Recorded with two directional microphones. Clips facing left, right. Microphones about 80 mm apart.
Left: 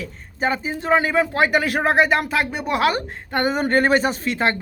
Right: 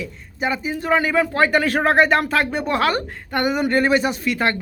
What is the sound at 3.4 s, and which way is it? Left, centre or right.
Speech, left.